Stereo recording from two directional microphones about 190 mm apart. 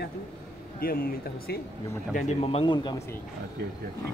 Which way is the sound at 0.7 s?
50° left (ahead or behind).